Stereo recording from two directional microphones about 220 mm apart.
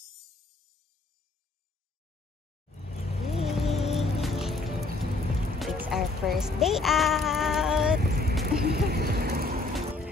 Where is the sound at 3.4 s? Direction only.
Centre (ahead or behind).